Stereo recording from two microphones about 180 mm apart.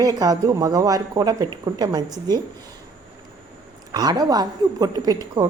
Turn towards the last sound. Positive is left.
turn(degrees=-20)  # may be behind; listen again after turning